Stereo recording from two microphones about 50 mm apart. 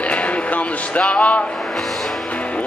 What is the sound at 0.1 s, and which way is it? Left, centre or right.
Music, left.